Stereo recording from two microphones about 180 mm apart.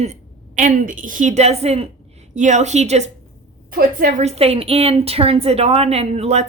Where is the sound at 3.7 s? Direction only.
50° right (ahead or behind).